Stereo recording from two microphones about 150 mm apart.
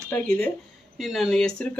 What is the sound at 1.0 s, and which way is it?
Speech, centre (ahead or behind).